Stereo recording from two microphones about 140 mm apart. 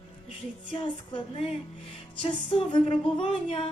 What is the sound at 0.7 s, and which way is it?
Music, 40° left (ahead or behind).